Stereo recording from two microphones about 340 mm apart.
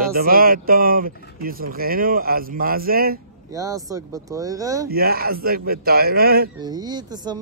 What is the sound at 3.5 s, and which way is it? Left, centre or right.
Speech, centre.